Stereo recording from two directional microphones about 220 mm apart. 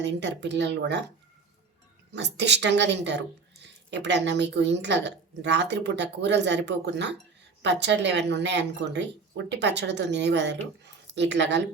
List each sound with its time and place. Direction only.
0.0 s speech: 50° right (ahead or behind)
2.1 s speech: 50° right (ahead or behind)